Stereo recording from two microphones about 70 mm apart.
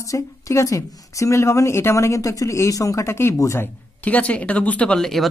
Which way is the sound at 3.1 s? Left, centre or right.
Left.